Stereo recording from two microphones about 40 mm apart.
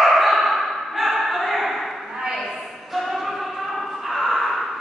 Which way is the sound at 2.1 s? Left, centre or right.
Centre.